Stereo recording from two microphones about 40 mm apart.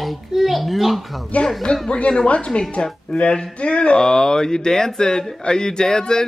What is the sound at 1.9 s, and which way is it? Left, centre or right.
Speech, left.